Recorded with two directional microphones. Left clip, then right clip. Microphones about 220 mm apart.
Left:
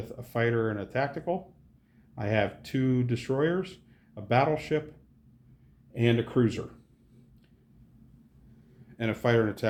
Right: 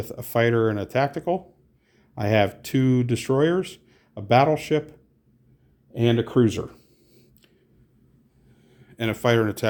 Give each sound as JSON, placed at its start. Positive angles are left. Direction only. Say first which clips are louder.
{"t": 0.0, "sound": "speech", "louder": "right 7 dB", "side_deg": -50}
{"t": 8.9, "sound": "speech", "louder": "right 5 dB", "side_deg": -35}